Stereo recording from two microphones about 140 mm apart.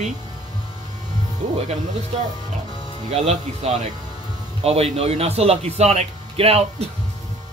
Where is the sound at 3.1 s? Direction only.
50° right (ahead or behind).